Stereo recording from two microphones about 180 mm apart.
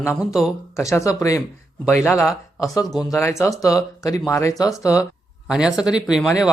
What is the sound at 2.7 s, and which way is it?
Speech, 20° left (ahead or behind).